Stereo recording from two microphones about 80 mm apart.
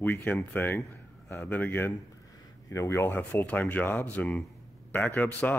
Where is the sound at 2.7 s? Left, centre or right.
Left.